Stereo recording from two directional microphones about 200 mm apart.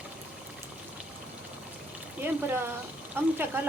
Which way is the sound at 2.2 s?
10° right (ahead or behind).